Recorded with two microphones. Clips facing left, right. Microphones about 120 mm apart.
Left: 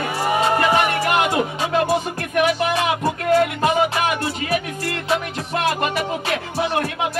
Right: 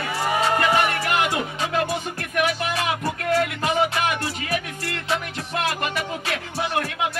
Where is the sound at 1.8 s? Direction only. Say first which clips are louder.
Left 6 dB; 25° left (ahead or behind).